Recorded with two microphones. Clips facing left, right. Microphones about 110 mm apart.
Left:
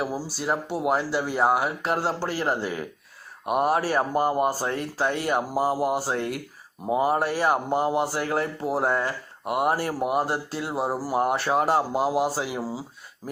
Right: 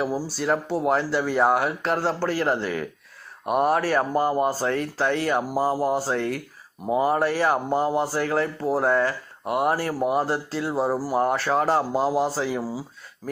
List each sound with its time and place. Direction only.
0.0 s speech: 10° left (ahead or behind)